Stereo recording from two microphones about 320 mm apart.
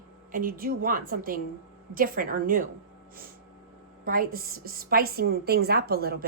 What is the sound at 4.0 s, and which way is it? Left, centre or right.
A woman's voice, right.